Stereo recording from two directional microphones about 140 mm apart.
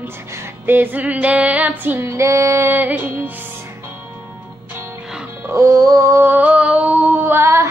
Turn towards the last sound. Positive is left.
turn(degrees=-20)  # may be behind; listen again after turning